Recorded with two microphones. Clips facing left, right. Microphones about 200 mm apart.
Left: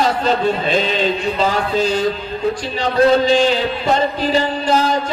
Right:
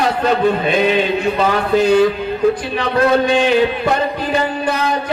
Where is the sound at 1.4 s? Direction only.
60° right (ahead or behind).